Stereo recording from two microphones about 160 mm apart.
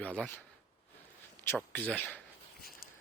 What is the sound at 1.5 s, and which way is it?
Speech, 5° left (ahead or behind).